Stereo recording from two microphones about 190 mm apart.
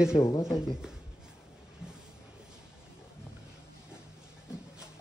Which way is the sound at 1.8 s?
5° right (ahead or behind).